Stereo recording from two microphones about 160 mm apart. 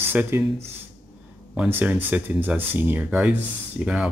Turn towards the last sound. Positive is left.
turn(degrees=-10)  # may be behind; listen again after turning